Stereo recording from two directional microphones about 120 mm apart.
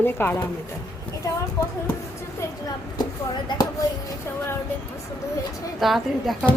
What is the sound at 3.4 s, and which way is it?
Speech, 35° left (ahead or behind).